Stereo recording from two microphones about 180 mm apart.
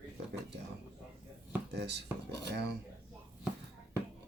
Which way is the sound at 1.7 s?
70° right (ahead or behind).